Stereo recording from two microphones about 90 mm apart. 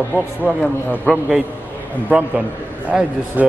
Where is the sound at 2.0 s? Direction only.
15° right (ahead or behind).